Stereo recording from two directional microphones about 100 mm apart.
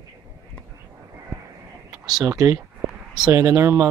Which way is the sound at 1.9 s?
5° right (ahead or behind).